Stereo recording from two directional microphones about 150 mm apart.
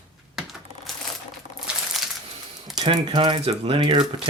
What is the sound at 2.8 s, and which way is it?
Speech, 35° right (ahead or behind).